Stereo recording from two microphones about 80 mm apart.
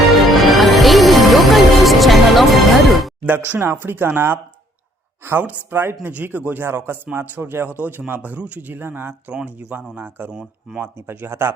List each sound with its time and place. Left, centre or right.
0.1 s music: centre
3.2 s speech: right
9.3 s speech: centre